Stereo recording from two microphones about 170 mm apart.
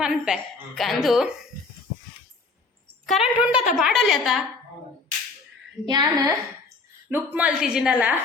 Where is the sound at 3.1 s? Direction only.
5° right (ahead or behind).